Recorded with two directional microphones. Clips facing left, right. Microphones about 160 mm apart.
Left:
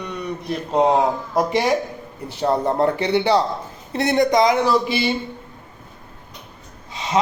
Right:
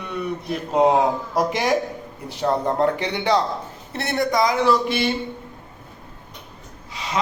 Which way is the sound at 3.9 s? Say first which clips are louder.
Left 5 dB; 15° left (ahead or behind).